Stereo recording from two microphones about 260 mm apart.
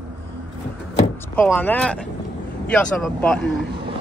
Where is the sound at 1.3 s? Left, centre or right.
Centre.